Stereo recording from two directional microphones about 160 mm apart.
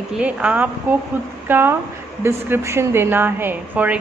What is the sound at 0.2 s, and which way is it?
A woman's voice, 10° right (ahead or behind).